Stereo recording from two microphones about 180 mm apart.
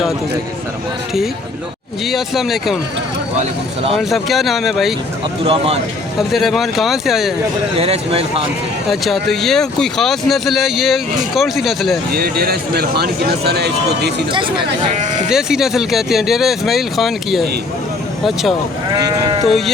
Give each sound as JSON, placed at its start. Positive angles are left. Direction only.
{"t": 2.0, "sound": "speech", "side_deg": 0}
{"t": 3.9, "sound": "speech", "side_deg": 0}
{"t": 5.5, "sound": "speech", "side_deg": -35}
{"t": 6.1, "sound": "speech", "side_deg": 0}
{"t": 7.8, "sound": "speech", "side_deg": -35}
{"t": 8.9, "sound": "speech", "side_deg": 0}
{"t": 12.1, "sound": "speech", "side_deg": -60}
{"t": 14.3, "sound": "speech", "side_deg": -30}
{"t": 14.9, "sound": "speech", "side_deg": -40}
{"t": 15.3, "sound": "speech", "side_deg": -5}
{"t": 18.9, "sound": "speech", "side_deg": -20}
{"t": 19.5, "sound": "speech", "side_deg": 0}